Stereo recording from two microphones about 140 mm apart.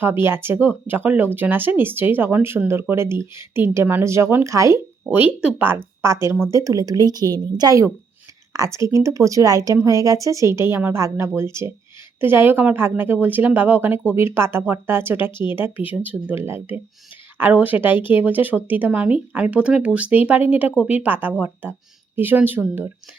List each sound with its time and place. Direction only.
0.0 s speech: 15° right (ahead or behind)